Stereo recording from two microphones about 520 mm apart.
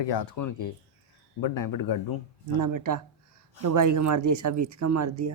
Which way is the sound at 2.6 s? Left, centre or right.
Right.